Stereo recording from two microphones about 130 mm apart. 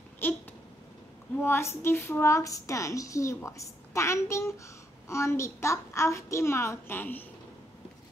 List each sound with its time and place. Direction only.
0.2 s a woman's voice: 15° left (ahead or behind)